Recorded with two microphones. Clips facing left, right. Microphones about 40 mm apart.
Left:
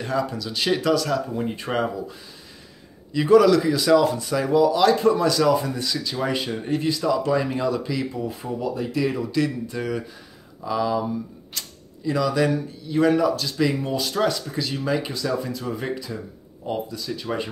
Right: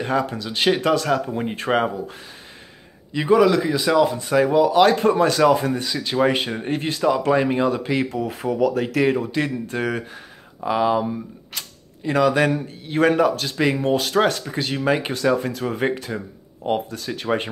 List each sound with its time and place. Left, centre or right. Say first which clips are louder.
0.0 s speech: right 3 dB; right
3.1 s speech: left 1 dB; right
4.2 s speech: right 2 dB; right
8.1 s speech: right 5 dB; right
9.0 s speech: right 1 dB; right
9.8 s speech: right 3 dB; right
10.6 s speech: right 4 dB; right
11.6 s creak: right 1 dB; right
12.1 s speech: right 3 dB; right